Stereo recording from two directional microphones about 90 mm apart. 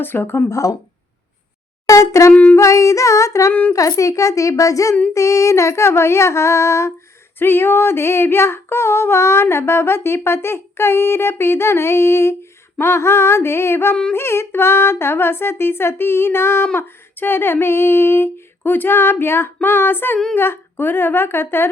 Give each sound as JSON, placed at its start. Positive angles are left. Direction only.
{"t": 0.0, "sound": "female singing", "side_deg": 25}
{"t": 1.9, "sound": "female singing", "side_deg": 35}
{"t": 2.3, "sound": "a sound", "side_deg": 20}
{"t": 2.6, "sound": "female singing", "side_deg": 35}